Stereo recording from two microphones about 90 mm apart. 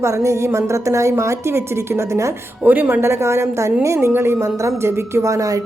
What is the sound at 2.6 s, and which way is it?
A woman's voice, 20° right (ahead or behind).